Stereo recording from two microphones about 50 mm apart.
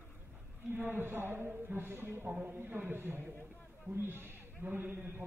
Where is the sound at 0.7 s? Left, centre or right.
Right.